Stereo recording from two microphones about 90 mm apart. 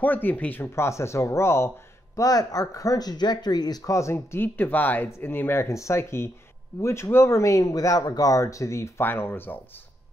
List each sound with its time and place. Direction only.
0.0 s speech: 20° left (ahead or behind)
2.1 s speech: 40° left (ahead or behind); by 9.6 s 20° left (ahead or behind)